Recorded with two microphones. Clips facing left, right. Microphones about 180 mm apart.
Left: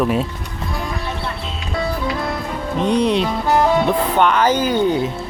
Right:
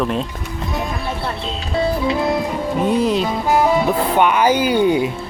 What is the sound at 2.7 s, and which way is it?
Speech, 5° right (ahead or behind).